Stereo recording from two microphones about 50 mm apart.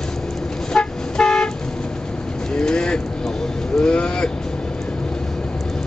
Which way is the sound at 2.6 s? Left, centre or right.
Centre.